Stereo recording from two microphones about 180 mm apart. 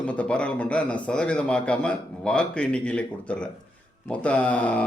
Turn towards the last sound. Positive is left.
turn(degrees=10)  # may be behind; listen again after turning